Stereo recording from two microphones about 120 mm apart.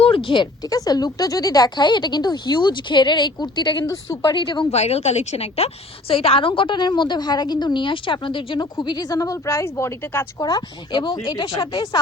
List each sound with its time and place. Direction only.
0.0 s a sound: 45° left (ahead or behind)
0.7 s speech: 30° left (ahead or behind)
4.7 s a woman's voice: 60° left (ahead or behind); by 10.2 s 20° left (ahead or behind)
10.4 s speech: 40° left (ahead or behind)